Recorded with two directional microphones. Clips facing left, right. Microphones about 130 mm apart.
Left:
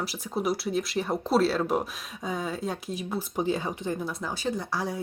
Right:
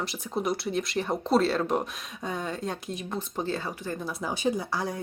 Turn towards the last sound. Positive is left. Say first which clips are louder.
# even
turn(degrees=0)  # may be behind; listen again after turning